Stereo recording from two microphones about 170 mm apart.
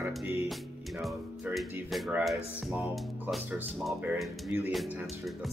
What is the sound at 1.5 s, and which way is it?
Speech, centre (ahead or behind).